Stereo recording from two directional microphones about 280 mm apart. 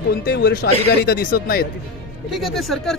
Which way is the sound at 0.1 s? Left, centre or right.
Left.